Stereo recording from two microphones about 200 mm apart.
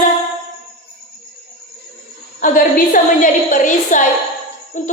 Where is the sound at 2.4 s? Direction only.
45° left (ahead or behind).